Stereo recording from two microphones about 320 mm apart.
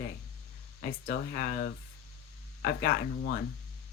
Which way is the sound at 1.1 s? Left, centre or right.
Left.